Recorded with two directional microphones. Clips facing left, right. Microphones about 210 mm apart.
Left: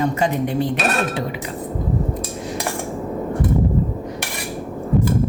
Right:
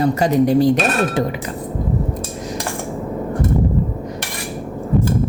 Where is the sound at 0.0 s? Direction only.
40° right (ahead or behind).